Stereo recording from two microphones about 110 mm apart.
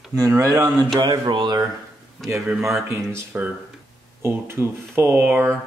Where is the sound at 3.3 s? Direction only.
15° right (ahead or behind).